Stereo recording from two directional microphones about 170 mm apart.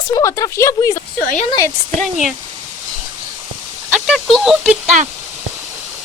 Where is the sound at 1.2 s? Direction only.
50° left (ahead or behind).